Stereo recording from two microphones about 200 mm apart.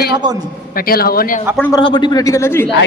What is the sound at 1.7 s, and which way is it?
Speech, 25° left (ahead or behind).